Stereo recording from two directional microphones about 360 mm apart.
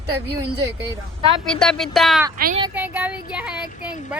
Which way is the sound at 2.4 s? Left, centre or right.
Right.